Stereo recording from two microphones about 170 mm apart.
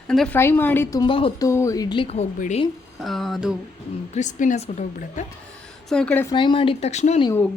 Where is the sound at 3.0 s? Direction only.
Centre (ahead or behind).